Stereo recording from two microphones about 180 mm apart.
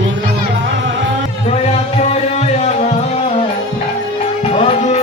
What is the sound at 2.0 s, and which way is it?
Music, 40° left (ahead or behind).